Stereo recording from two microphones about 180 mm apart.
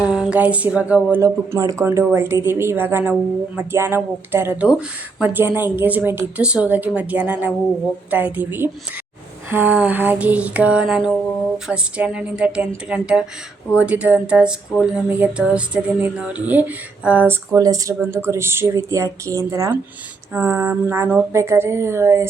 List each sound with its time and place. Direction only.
0.0 s speech: 5° right (ahead or behind)
1.2 s speech: 20° right (ahead or behind)